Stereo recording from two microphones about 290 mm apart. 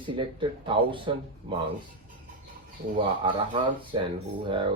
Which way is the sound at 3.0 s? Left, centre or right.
Centre.